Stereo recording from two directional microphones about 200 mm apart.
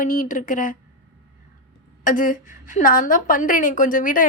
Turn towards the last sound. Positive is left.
turn(degrees=40)  # may be behind; listen again after turning